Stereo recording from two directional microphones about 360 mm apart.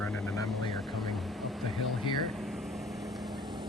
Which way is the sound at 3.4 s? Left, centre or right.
Centre.